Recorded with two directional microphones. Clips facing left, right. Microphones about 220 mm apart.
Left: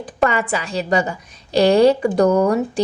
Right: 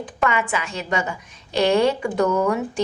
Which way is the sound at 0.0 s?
35° left (ahead or behind).